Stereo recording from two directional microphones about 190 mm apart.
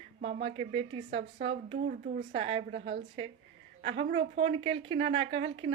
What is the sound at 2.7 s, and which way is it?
Speech, 65° right (ahead or behind).